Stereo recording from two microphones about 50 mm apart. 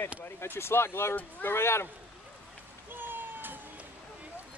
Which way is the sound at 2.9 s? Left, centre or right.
Right.